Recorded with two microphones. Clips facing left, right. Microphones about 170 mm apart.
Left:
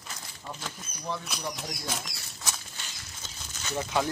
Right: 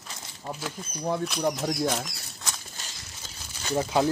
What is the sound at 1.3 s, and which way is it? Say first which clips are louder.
Speech: right 10 dB; centre (ahead or behind).